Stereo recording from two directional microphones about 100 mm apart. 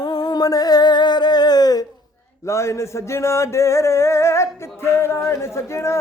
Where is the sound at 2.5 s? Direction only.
30° left (ahead or behind).